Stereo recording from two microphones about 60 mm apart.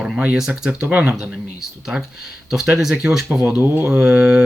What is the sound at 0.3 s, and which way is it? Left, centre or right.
Speech, centre.